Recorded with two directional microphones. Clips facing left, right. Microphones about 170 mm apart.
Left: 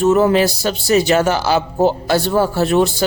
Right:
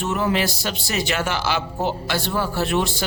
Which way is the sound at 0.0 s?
40° left (ahead or behind).